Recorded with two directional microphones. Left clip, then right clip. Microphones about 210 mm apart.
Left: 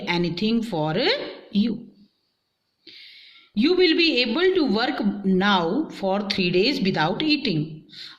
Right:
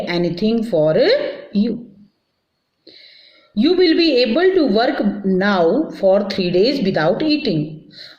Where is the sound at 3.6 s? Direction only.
35° left (ahead or behind).